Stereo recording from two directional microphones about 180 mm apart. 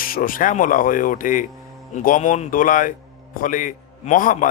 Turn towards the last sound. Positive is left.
turn(degrees=45)  # may be behind; listen again after turning